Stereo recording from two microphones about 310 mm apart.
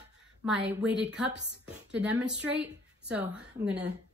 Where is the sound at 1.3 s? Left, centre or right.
Right.